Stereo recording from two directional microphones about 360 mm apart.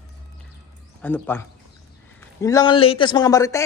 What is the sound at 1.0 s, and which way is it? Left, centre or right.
A man's voice, centre.